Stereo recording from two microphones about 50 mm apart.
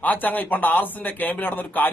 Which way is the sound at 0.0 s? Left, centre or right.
Left.